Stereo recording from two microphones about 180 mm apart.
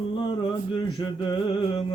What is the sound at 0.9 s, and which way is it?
Mantra, 25° left (ahead or behind).